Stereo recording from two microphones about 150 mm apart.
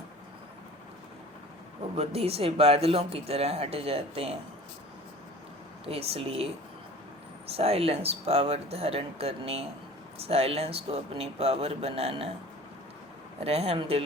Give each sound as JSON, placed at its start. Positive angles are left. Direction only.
{"t": 2.0, "sound": "speech", "side_deg": -40}
{"t": 5.8, "sound": "speech", "side_deg": -40}
{"t": 7.5, "sound": "speech", "side_deg": -40}
{"t": 13.4, "sound": "speech", "side_deg": -40}